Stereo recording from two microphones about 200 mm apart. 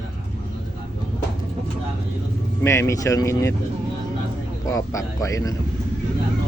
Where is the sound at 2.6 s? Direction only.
15° left (ahead or behind).